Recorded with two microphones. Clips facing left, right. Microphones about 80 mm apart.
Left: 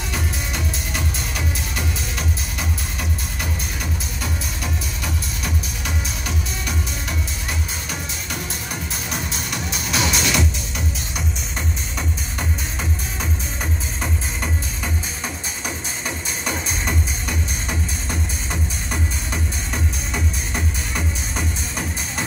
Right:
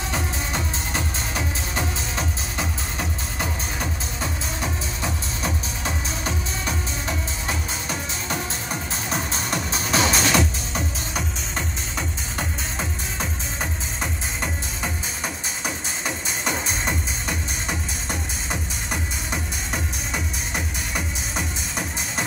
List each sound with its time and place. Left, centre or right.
0.1 s music: right
4.2 s music: right
9.1 s music: right
14.4 s music: right